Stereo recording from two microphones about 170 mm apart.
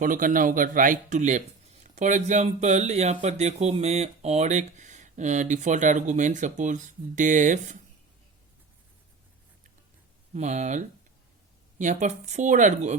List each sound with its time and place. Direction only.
0.0 s speech: 55° right (ahead or behind)
10.3 s speech: 45° right (ahead or behind)